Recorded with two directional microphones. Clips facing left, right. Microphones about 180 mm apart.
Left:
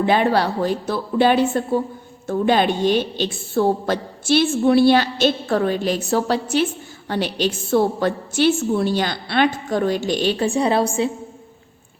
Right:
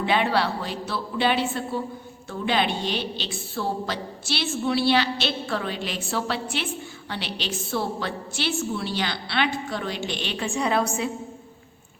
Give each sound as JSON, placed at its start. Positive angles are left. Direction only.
{"t": 0.0, "sound": "a woman's voice", "side_deg": 45}